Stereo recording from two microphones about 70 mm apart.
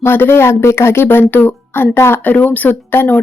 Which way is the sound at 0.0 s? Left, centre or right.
Left.